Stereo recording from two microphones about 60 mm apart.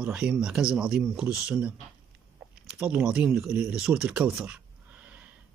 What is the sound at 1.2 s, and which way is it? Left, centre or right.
Speech, right.